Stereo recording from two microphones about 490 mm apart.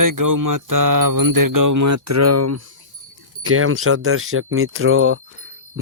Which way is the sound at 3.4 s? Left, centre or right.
Right.